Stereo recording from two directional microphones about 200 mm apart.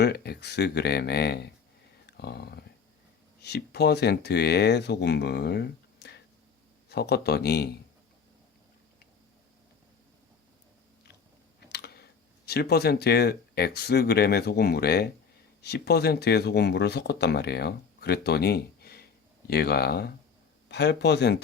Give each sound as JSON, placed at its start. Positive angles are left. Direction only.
{"t": 0.0, "sound": "speech", "side_deg": 55}
{"t": 11.7, "sound": "a sound", "side_deg": 55}
{"t": 12.5, "sound": "speech", "side_deg": 55}